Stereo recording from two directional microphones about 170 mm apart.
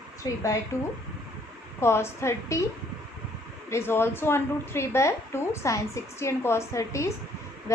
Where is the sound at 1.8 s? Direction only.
15° left (ahead or behind).